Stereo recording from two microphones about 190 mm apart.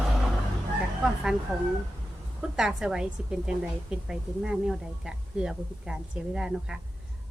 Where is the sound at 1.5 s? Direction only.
Centre (ahead or behind).